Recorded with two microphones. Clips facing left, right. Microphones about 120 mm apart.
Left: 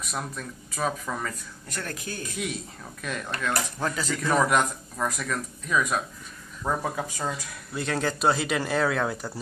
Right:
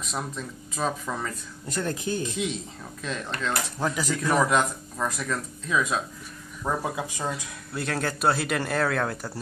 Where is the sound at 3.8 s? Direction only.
10° right (ahead or behind).